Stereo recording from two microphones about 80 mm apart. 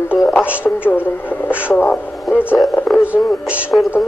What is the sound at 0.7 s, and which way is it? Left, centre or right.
Speech, left.